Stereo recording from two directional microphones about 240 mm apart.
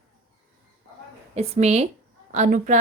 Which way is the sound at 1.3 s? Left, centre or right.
Right.